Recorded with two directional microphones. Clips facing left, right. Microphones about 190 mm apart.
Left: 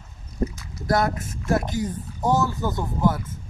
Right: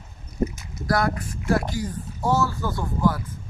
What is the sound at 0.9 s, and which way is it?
Speech, 20° left (ahead or behind).